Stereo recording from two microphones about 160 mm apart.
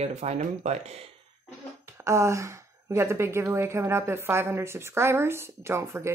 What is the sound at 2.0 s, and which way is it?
A woman's voice, 15° right (ahead or behind).